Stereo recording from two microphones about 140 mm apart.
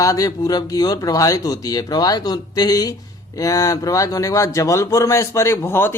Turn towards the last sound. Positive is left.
turn(degrees=15)  # may be behind; listen again after turning